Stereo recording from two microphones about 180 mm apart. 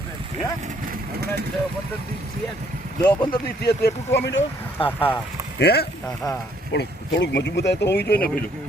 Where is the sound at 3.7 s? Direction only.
65° left (ahead or behind).